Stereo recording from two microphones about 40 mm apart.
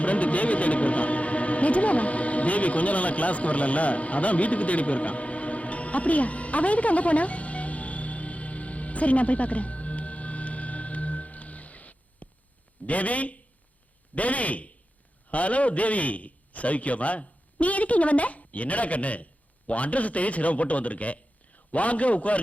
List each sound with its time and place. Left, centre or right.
0.0 s music: left
12.8 s a man's voice: left